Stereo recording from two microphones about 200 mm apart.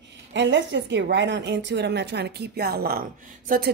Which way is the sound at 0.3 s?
65° right (ahead or behind).